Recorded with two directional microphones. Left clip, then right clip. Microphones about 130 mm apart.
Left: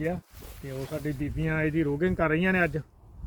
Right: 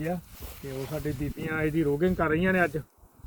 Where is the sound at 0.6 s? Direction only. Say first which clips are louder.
Even; 35° left (ahead or behind).